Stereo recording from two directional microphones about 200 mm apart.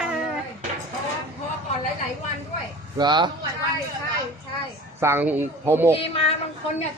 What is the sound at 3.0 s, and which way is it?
Speech, 20° right (ahead or behind).